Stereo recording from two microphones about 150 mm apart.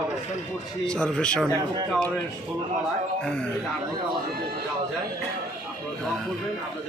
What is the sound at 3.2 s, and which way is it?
Speech, 5° left (ahead or behind).